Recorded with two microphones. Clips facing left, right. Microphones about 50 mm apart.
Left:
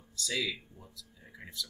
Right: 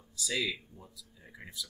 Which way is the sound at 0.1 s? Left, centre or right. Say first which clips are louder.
Right 1 dB; centre.